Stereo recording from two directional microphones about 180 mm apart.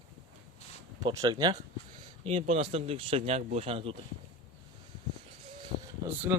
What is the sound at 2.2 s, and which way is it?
Speech, 40° right (ahead or behind).